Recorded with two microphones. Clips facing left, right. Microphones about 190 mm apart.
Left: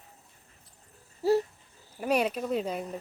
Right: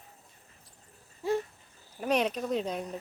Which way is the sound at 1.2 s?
40° left (ahead or behind).